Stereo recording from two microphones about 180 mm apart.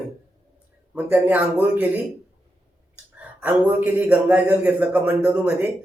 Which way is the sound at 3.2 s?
5° right (ahead or behind).